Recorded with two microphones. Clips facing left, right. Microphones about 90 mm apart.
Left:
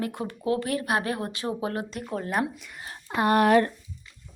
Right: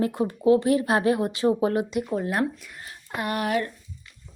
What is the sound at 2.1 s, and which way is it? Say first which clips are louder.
Speech: right 3 dB; centre (ahead or behind).